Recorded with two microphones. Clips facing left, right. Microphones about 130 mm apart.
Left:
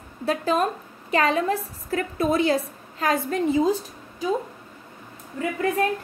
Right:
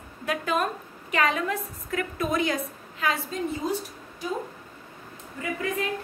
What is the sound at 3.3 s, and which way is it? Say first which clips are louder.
Speech: left 9 dB; 90° left.